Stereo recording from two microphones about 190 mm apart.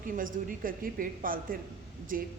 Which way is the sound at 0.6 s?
50° right (ahead or behind).